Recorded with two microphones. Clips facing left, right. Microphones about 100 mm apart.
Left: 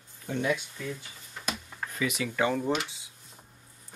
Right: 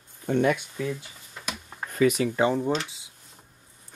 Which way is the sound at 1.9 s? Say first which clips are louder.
Right 10 dB; 45° right (ahead or behind).